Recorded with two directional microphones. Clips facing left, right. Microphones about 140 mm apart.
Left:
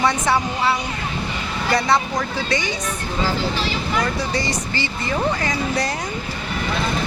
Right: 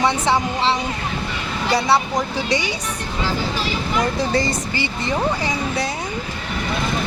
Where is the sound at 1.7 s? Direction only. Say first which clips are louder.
Right 1 dB; 10° right (ahead or behind).